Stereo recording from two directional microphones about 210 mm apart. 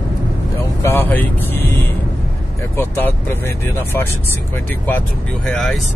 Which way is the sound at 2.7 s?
10° left (ahead or behind).